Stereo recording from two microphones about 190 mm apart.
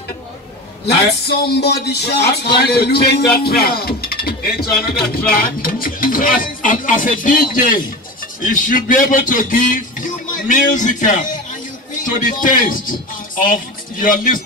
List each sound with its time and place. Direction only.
0.8 s a man's voice: 60° left (ahead or behind)